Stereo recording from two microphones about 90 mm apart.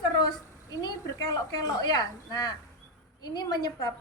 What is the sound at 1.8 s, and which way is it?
A woman's voice, 50° left (ahead or behind).